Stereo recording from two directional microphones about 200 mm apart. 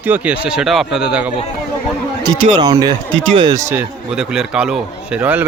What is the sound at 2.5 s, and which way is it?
A man's voice, 20° right (ahead or behind).